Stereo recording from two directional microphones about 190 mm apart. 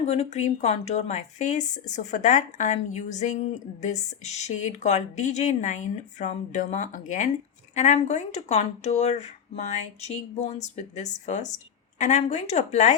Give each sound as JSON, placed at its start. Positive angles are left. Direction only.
{"t": 0.0, "sound": "speech", "side_deg": 35}